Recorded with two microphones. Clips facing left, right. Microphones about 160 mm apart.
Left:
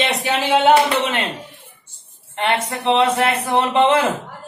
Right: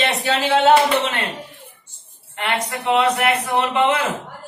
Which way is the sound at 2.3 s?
30° left (ahead or behind).